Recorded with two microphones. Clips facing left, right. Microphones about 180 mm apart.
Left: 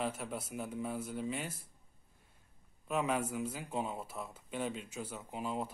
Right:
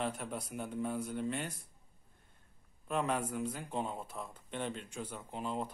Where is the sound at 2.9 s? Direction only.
5° left (ahead or behind).